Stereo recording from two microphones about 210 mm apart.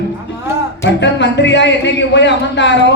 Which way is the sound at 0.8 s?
55° left (ahead or behind).